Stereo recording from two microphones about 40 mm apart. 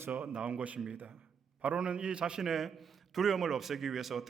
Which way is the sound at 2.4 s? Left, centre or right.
Centre.